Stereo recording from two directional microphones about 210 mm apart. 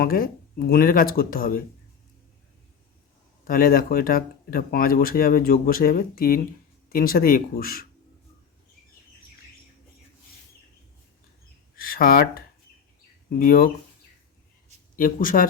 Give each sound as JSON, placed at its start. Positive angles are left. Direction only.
{"t": 0.0, "sound": "speech", "side_deg": 45}
{"t": 3.4, "sound": "speech", "side_deg": 45}
{"t": 11.8, "sound": "speech", "side_deg": 45}
{"t": 13.4, "sound": "speech", "side_deg": 45}
{"t": 14.9, "sound": "speech", "side_deg": 40}